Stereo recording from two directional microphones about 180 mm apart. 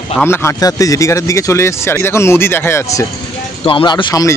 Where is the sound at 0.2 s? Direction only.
15° left (ahead or behind).